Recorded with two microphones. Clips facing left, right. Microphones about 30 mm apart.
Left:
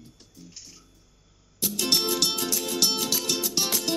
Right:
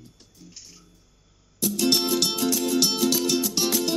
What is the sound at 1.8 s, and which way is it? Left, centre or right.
Music, centre.